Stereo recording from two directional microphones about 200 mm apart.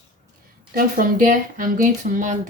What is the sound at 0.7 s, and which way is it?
Speech, 45° right (ahead or behind).